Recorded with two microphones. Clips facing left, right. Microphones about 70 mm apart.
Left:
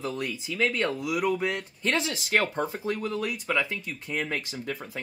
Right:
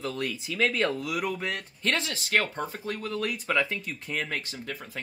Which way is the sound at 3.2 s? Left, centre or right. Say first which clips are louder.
Even; centre.